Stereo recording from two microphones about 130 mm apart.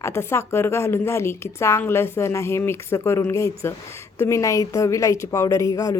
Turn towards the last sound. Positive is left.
turn(degrees=25)  # may be behind; listen again after turning